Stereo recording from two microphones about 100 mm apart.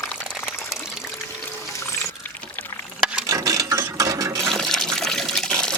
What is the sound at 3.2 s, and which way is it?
Ratchet, 35° right (ahead or behind).